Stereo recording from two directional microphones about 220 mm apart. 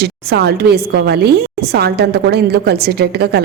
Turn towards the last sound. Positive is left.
turn(degrees=-45)  # may be behind; listen again after turning